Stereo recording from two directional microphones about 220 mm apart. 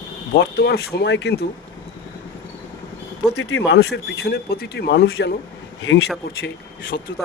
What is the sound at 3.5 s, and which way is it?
Speech, 50° left (ahead or behind).